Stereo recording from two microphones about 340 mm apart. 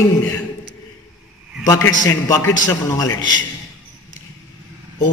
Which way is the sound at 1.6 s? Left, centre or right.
Centre.